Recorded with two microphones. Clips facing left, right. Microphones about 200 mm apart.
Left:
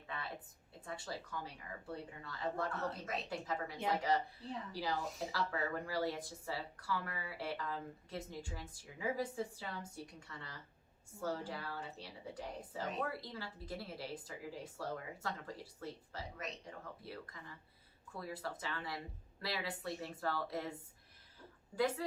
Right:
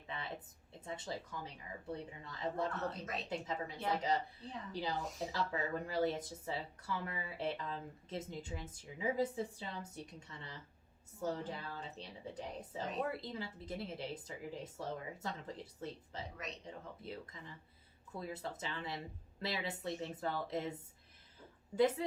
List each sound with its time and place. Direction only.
0.1 s speech: 20° right (ahead or behind)
2.7 s speech: centre (ahead or behind)
3.2 s speech: 20° right (ahead or behind)
4.4 s speech: centre (ahead or behind)
4.7 s speech: 20° right (ahead or behind)
21.8 s speech: 20° right (ahead or behind)